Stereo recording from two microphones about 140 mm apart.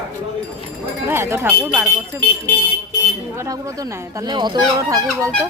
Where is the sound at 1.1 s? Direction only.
15° right (ahead or behind).